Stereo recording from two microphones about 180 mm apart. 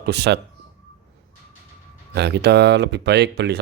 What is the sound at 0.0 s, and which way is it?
Speech, 65° right (ahead or behind).